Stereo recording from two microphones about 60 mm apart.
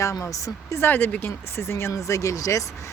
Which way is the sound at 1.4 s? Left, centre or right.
Left.